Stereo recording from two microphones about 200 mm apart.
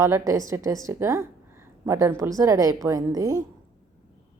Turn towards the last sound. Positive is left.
turn(degrees=-15)  # may be behind; listen again after turning